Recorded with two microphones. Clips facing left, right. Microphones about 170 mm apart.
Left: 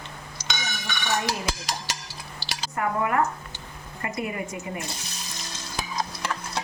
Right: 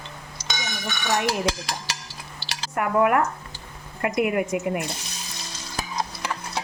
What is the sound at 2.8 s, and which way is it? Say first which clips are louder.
A woman's voice: right 4 dB; 70° right (ahead or behind).